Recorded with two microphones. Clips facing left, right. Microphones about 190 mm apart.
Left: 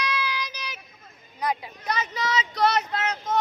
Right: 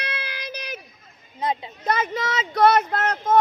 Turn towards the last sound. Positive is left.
turn(degrees=-50)  # may be behind; listen again after turning